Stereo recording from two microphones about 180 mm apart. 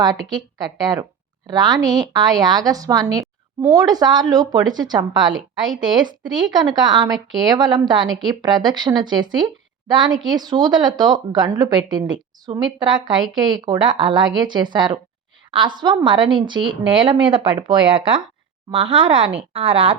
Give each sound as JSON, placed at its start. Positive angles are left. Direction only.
{"t": 0.6, "sound": "a woman's voice", "side_deg": -20}